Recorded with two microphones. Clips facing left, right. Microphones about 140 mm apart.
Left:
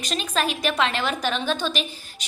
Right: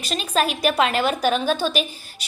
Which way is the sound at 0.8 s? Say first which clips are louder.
Right 5 dB; 45° right (ahead or behind).